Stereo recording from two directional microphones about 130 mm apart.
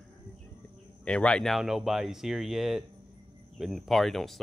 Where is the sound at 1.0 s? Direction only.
5° left (ahead or behind).